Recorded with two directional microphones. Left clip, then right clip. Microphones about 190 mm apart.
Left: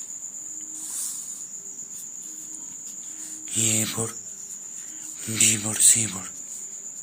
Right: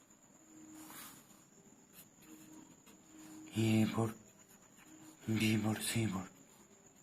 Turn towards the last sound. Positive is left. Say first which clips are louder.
# left 16 dB
turn(degrees=15)  # may be behind; listen again after turning